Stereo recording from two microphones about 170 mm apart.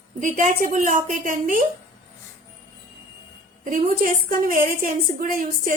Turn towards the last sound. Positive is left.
turn(degrees=-50)  # may be behind; listen again after turning